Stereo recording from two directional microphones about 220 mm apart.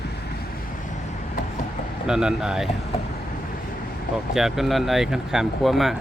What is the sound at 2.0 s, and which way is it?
Speech, 5° right (ahead or behind).